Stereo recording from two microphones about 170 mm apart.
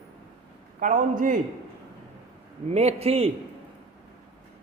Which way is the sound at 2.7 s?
40° right (ahead or behind).